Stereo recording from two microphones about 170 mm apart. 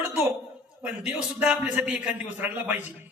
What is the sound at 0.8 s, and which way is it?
A man's voice, 10° right (ahead or behind).